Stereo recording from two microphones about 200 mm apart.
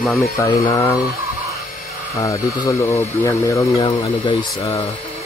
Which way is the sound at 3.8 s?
25° left (ahead or behind).